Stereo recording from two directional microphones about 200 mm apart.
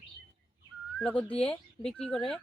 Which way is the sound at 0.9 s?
5° left (ahead or behind).